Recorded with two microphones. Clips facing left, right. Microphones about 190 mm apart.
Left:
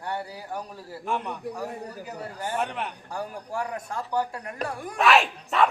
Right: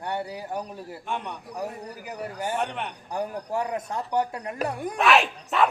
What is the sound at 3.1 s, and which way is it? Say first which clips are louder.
Speech: right 5 dB; 20° right (ahead or behind).